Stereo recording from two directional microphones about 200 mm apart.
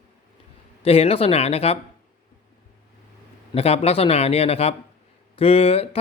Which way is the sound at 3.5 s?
30° left (ahead or behind).